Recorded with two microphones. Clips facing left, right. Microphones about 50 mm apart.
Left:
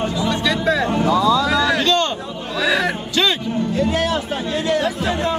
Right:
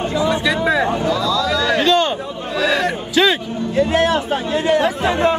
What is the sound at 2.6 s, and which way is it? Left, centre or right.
Music, centre.